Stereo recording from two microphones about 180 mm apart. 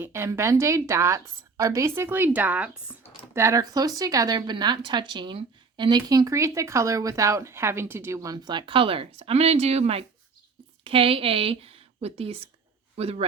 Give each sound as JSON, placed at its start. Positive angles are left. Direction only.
{"t": 0.0, "sound": "a woman's voice", "side_deg": -15}